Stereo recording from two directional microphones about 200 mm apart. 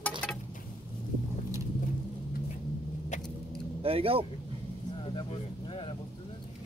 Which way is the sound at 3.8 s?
30° right (ahead or behind).